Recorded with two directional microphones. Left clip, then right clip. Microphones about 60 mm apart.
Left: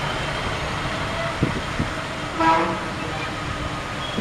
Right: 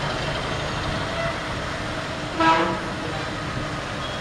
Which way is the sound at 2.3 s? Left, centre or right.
Right.